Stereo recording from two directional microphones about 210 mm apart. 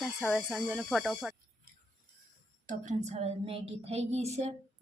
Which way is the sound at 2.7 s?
35° right (ahead or behind).